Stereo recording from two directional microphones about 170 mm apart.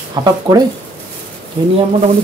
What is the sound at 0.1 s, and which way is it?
Speech, 25° right (ahead or behind).